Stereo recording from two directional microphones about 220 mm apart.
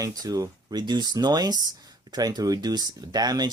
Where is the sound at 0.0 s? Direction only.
15° right (ahead or behind).